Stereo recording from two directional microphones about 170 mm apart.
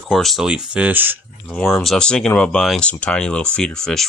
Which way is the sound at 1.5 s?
Centre (ahead or behind).